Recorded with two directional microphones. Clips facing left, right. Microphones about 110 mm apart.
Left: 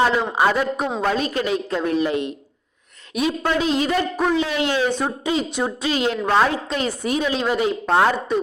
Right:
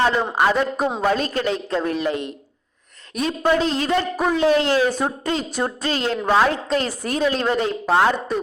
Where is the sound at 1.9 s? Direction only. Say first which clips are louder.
Left 2 dB; 20° left (ahead or behind).